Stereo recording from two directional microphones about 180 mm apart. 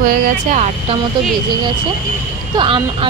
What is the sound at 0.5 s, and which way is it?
Speech, 40° right (ahead or behind).